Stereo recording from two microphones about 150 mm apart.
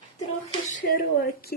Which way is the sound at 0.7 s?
65° left (ahead or behind).